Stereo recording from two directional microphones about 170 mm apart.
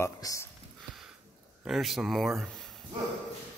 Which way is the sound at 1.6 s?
Centre (ahead or behind).